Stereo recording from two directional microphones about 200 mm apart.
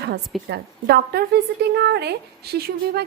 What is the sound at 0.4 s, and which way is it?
A woman's voice, 55° right (ahead or behind).